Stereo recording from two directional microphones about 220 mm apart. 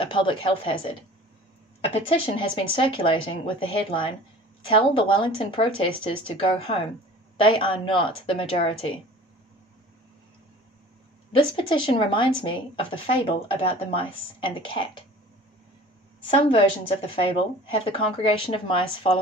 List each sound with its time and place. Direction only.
0.0 s speech: 25° left (ahead or behind)
11.3 s speech: 25° left (ahead or behind)
16.4 s speech: 25° left (ahead or behind)